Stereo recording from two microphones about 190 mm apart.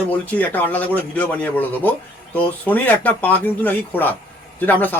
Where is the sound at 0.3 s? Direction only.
10° left (ahead or behind).